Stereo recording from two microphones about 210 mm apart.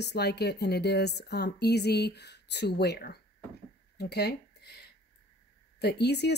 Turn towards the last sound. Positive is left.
turn(degrees=55)  # may be behind; listen again after turning